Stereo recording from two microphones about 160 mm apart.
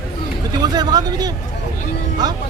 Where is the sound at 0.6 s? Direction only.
25° right (ahead or behind).